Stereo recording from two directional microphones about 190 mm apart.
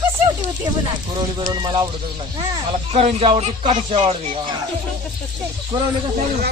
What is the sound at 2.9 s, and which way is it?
Speech, 35° right (ahead or behind).